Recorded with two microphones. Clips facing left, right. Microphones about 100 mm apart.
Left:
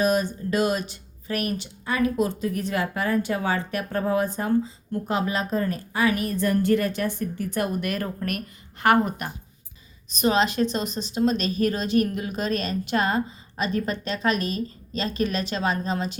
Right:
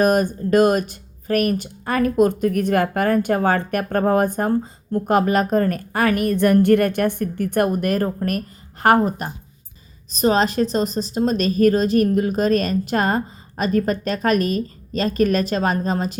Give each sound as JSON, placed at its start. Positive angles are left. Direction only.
{"t": 0.0, "sound": "speech", "side_deg": -50}